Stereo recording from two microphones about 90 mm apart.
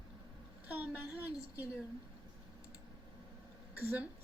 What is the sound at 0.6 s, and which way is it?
Speech, 15° right (ahead or behind).